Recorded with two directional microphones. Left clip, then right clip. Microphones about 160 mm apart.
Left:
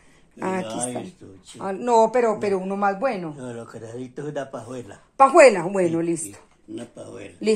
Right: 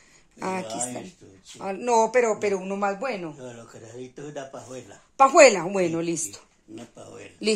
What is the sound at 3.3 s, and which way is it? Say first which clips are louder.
Speech: left 6 dB; 35° left (ahead or behind).